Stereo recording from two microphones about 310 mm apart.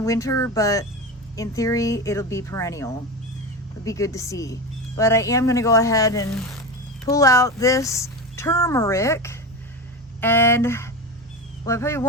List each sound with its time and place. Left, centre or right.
0.0 s speech: centre